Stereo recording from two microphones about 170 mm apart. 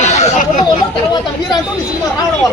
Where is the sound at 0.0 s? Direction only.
40° left (ahead or behind).